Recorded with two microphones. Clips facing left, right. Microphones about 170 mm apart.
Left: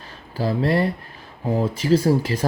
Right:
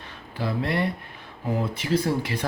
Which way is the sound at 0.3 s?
35° left (ahead or behind).